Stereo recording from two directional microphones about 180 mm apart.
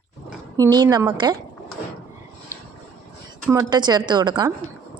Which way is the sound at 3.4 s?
20° right (ahead or behind).